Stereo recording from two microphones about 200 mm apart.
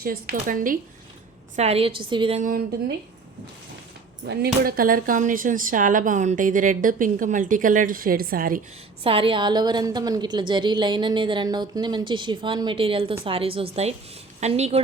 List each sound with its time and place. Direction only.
0.0 s a woman's voice: 50° right (ahead or behind)
1.5 s a woman's voice: 30° right (ahead or behind)
2.4 s a woman's voice: 45° right (ahead or behind)
4.3 s speech: 45° right (ahead or behind)
9.0 s a woman's voice: 25° right (ahead or behind)